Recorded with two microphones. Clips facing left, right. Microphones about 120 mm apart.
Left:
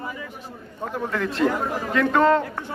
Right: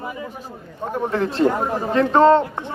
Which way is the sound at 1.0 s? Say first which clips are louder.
Right 4 dB; 30° right (ahead or behind).